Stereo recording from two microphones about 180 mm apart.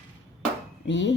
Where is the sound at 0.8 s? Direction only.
80° left.